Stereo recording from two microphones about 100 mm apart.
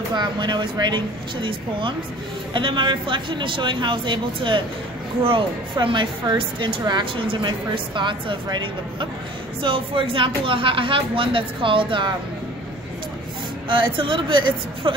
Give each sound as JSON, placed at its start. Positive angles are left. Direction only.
{"t": 0.1, "sound": "speech", "side_deg": -45}
{"t": 7.2, "sound": "speech", "side_deg": -55}
{"t": 13.7, "sound": "speech", "side_deg": -55}